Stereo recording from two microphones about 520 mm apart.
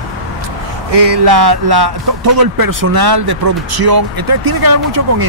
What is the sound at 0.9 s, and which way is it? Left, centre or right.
Speech, right.